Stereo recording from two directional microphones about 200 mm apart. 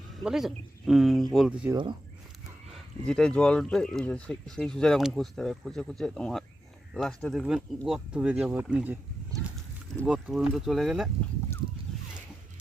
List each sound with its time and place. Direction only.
0.2 s speech: centre (ahead or behind)
1.7 s speech: 25° right (ahead or behind)
2.7 s speech: 5° left (ahead or behind)